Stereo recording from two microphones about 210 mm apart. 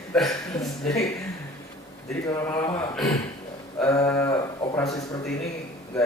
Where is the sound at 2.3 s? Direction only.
15° left (ahead or behind).